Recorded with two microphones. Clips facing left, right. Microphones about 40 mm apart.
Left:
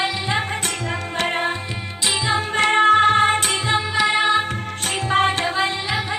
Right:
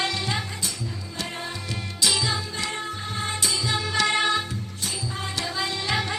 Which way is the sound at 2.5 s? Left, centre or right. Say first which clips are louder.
Left 16 dB; left.